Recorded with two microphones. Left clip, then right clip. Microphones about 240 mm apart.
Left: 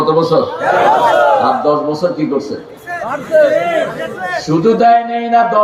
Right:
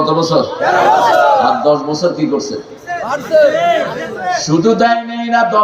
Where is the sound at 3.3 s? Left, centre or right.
Right.